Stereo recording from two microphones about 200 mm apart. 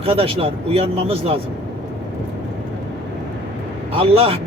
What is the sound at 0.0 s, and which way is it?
Speech, 30° right (ahead or behind).